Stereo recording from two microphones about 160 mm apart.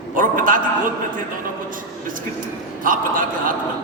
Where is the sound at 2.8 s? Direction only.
60° right (ahead or behind).